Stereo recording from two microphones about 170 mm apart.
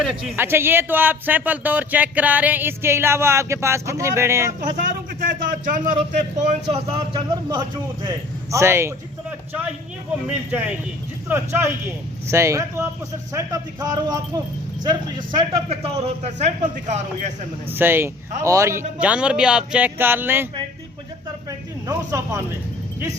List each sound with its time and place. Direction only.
0.0 s speech: centre (ahead or behind)
0.3 s speech: 15° right (ahead or behind)
5.2 s speech: 55° right (ahead or behind)
6.0 s speech: 40° right (ahead or behind)
8.0 s speech: 15° right (ahead or behind)
11.3 s speech: 10° right (ahead or behind)
15.4 s speech: 35° right (ahead or behind)
17.7 s speech: 10° right (ahead or behind)
21.8 s speech: 15° right (ahead or behind)